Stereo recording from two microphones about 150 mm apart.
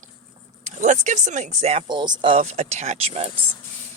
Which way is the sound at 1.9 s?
30° right (ahead or behind).